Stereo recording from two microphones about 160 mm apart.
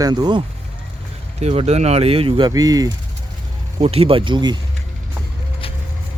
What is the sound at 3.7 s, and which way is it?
Speech, 40° right (ahead or behind).